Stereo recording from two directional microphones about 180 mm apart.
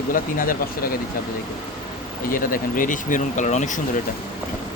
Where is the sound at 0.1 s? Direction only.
50° left (ahead or behind).